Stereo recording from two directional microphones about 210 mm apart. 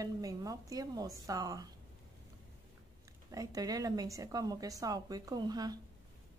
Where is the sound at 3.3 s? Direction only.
15° right (ahead or behind).